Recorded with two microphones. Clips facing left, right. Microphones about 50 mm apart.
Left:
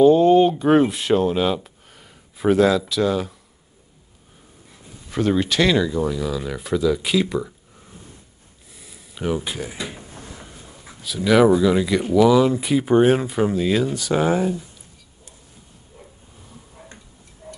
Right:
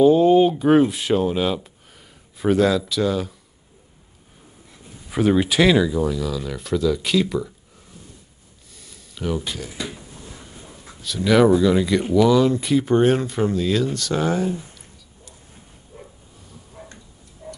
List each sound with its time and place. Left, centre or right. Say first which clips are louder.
0.0 s speech: left 1 dB; centre
5.1 s speech: right 2 dB; centre
6.1 s speech: left 1 dB; centre
8.7 s a sound: left 1 dB; centre
9.7 s speech: even; left
10.3 s speech: left 1 dB; centre
16.8 s tick-tock: right 2 dB; centre